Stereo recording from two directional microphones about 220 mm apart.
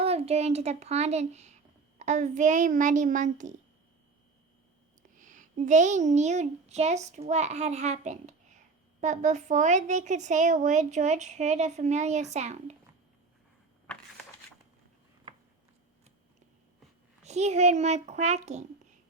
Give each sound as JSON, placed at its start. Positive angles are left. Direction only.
{"t": 0.0, "sound": "a woman's voice", "side_deg": -25}
{"t": 5.1, "sound": "a woman's voice", "side_deg": -35}
{"t": 17.2, "sound": "a woman's voice", "side_deg": -30}